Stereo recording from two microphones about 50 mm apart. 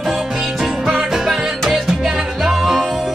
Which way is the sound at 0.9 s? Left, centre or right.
Centre.